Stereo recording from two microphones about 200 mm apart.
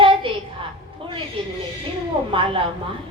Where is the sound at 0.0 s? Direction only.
25° right (ahead or behind).